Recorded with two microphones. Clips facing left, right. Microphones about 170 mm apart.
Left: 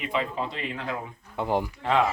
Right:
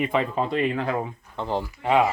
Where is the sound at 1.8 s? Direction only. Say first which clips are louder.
Right 5 dB; 10° right (ahead or behind).